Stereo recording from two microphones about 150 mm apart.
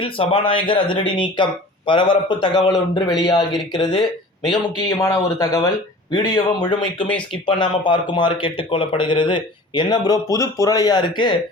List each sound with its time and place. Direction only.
0.0 s a man's voice: 35° left (ahead or behind)